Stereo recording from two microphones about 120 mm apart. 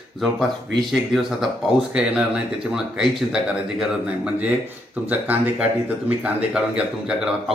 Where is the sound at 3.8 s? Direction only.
10° right (ahead or behind).